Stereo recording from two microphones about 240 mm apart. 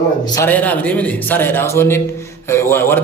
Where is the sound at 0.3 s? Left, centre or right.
Centre.